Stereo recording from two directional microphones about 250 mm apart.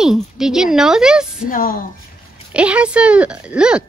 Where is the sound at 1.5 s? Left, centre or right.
Left.